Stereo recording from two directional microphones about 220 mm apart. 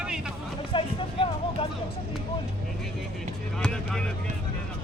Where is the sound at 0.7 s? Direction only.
25° left (ahead or behind).